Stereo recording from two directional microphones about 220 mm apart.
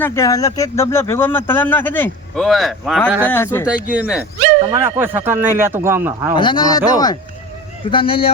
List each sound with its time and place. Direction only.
0.0 s speech: 15° left (ahead or behind); by 3.2 s 5° right (ahead or behind)
3.2 s speech: 10° left (ahead or behind)
3.8 s a man's voice: 5° right (ahead or behind)
6.3 s speech: 20° left (ahead or behind)